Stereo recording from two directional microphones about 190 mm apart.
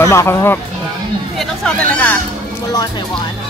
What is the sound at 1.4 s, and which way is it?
Chatter, 5° left (ahead or behind).